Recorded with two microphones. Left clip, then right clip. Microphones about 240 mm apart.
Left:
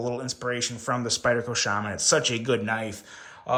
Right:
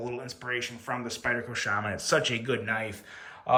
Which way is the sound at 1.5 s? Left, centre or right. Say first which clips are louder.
Left 3 dB; centre.